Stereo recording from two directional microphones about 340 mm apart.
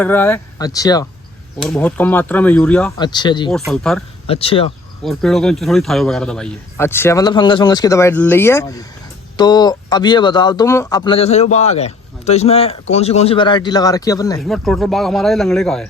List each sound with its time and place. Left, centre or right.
0.0 s speech: centre
3.5 s speech: centre
4.3 s speech: centre
5.0 s speech: centre